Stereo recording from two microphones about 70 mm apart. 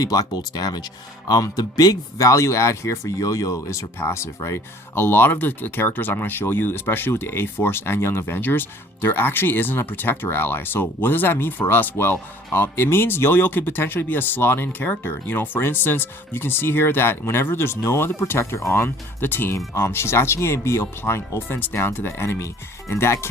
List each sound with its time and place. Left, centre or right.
0.0 s speech: left
0.3 s speech: left
1.3 s speech: left